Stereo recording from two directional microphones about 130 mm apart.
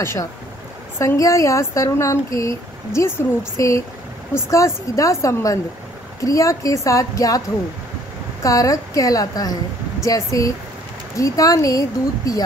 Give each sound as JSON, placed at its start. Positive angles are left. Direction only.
{"t": 0.0, "sound": "speech", "side_deg": 20}